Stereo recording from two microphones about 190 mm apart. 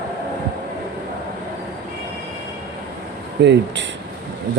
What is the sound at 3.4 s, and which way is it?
Speech, 65° right (ahead or behind).